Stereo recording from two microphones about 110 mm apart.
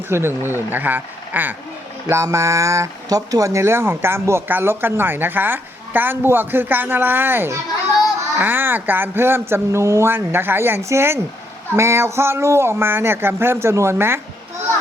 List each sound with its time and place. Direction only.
0.1 s speech: 20° right (ahead or behind)
2.0 s speech: 30° right (ahead or behind)